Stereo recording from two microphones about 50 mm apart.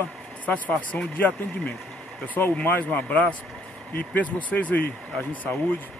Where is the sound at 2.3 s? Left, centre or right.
Left.